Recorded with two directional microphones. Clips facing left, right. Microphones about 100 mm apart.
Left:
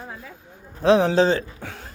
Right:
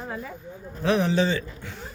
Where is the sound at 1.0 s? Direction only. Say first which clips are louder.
Left 5 dB; 45° left (ahead or behind).